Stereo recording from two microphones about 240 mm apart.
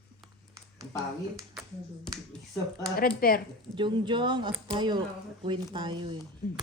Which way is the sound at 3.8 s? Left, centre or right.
Centre.